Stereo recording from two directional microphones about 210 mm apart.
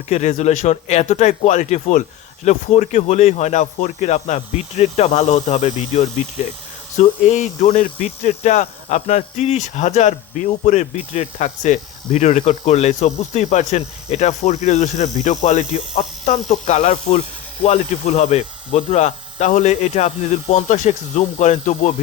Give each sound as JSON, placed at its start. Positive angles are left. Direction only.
{"t": 0.1, "sound": "speech", "side_deg": 35}